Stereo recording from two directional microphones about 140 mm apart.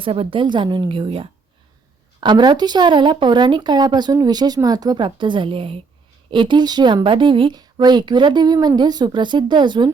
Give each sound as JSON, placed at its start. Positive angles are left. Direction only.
{"t": 0.0, "sound": "a woman's voice", "side_deg": -40}